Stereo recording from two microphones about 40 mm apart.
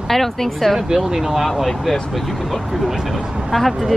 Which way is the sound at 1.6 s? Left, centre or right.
Centre.